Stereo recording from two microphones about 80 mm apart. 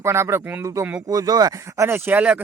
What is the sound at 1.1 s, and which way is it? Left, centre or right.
Speech, right.